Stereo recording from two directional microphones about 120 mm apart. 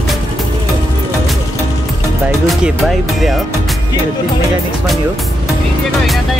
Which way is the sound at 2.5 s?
Centre (ahead or behind).